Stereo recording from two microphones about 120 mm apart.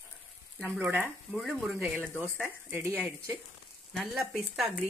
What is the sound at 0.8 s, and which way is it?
Speech, 15° right (ahead or behind).